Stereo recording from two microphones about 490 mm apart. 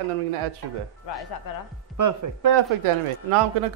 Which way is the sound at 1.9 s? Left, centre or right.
Right.